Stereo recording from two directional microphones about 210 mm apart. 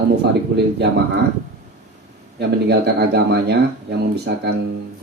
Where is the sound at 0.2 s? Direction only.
55° right (ahead or behind).